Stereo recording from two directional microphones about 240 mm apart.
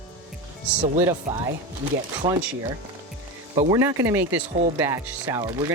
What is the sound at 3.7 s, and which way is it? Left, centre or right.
Speech, centre.